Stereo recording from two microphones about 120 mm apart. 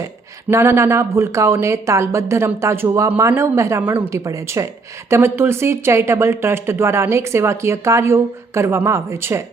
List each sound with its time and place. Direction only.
0.5 s a woman's voice: 20° right (ahead or behind)